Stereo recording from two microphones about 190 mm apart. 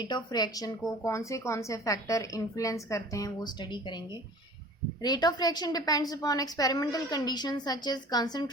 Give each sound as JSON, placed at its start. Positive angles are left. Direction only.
{"t": 0.0, "sound": "a woman's voice", "side_deg": 20}